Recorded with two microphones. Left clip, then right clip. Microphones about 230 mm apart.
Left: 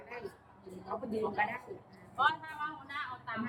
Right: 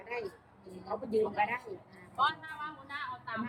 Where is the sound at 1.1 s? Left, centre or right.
Right.